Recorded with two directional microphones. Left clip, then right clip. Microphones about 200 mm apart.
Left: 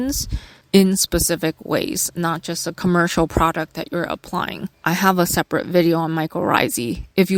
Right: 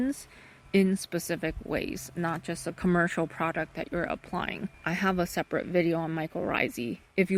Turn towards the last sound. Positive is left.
turn(degrees=55)  # may be behind; listen again after turning